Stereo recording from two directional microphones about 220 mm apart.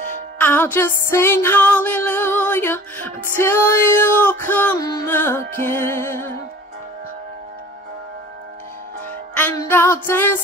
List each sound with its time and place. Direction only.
0.4 s music: 10° left (ahead or behind)
9.3 s music: 10° left (ahead or behind)